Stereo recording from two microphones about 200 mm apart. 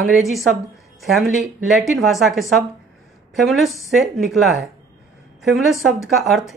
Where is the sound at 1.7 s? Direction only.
Centre (ahead or behind).